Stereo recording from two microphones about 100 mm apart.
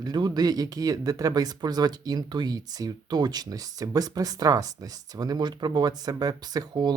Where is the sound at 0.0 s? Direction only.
45° right (ahead or behind).